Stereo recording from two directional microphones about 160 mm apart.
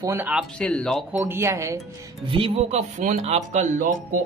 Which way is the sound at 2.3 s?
35° right (ahead or behind).